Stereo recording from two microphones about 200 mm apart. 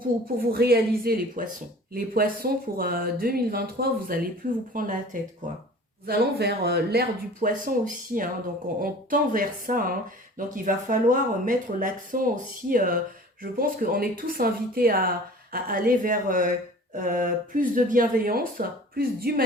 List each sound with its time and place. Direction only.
0.3 s speech: 50° right (ahead or behind)
6.1 s speech: 50° right (ahead or behind)